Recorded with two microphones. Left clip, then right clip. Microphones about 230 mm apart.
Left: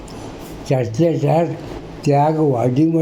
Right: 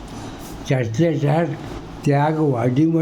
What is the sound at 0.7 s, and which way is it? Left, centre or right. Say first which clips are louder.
A man's voice: left 3 dB; centre.